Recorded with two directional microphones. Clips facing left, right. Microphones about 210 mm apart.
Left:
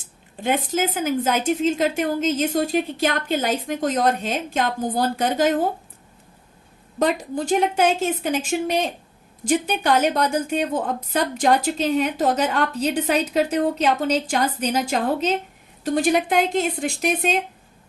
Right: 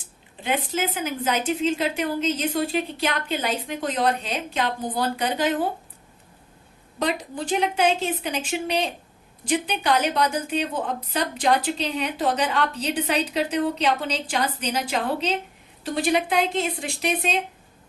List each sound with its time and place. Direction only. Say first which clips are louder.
0.4 s a woman's voice: left 4 dB; 45° left (ahead or behind)
7.0 s a woman's voice: left 5 dB; 45° left (ahead or behind)